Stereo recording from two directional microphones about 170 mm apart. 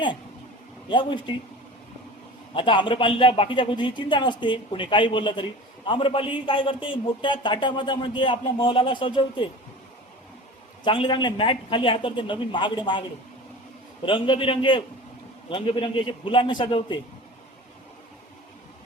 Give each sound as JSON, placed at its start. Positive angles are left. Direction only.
{"t": 0.9, "sound": "speech", "side_deg": 30}
{"t": 2.6, "sound": "speech", "side_deg": 30}
{"t": 10.8, "sound": "speech", "side_deg": 30}